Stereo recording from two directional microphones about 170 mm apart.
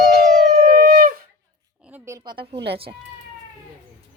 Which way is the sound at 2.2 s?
30° right (ahead or behind).